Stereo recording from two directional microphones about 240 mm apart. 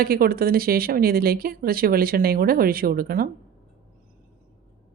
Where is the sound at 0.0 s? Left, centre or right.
Right.